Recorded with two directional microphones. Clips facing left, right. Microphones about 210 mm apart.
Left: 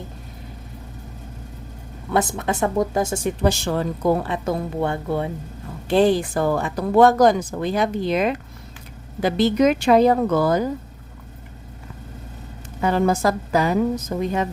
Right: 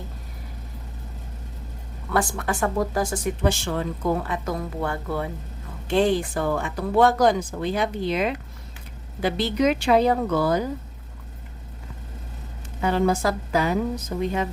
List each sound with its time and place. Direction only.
2.0 s speech: 20° left (ahead or behind)
3.4 s speech: 40° left (ahead or behind); by 5.3 s 25° left (ahead or behind)
5.9 s speech: 35° left (ahead or behind)
12.8 s speech: 45° left (ahead or behind)